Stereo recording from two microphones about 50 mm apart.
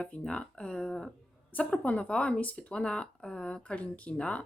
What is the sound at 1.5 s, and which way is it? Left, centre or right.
Speech, left.